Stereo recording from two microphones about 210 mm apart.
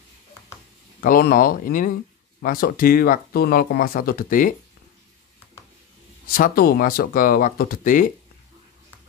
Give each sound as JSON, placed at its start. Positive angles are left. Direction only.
{"t": 1.0, "sound": "speech", "side_deg": 40}
{"t": 6.3, "sound": "speech", "side_deg": 45}